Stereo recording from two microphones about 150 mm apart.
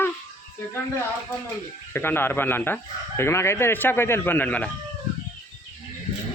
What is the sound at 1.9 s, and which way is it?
Speech, 15° left (ahead or behind).